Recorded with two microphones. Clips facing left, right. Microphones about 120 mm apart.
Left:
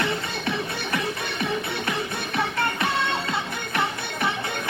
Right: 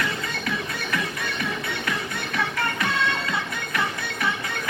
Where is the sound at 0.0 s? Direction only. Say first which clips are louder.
Left 2 dB; 30° left (ahead or behind).